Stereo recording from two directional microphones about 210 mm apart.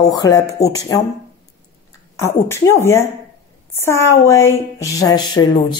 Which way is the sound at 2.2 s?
10° left (ahead or behind).